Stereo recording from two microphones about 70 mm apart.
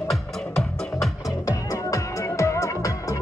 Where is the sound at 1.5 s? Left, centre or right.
Left.